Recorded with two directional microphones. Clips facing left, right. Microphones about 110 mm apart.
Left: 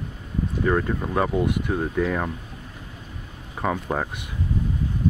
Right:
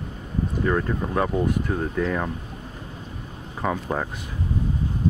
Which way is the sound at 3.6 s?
Centre (ahead or behind).